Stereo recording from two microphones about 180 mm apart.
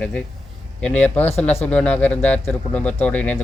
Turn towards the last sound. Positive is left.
turn(degrees=10)  # may be behind; listen again after turning